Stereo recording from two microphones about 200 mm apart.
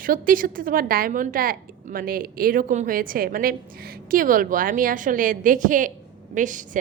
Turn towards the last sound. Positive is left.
turn(degrees=-40)  # may be behind; listen again after turning